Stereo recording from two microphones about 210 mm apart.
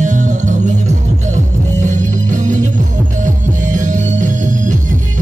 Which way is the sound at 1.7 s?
35° right (ahead or behind).